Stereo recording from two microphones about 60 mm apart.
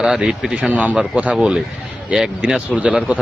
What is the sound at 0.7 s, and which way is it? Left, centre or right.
Speech, right.